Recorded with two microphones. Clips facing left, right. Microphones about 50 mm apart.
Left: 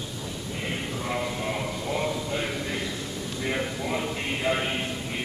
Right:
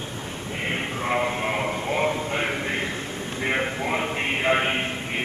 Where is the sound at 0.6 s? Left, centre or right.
Right.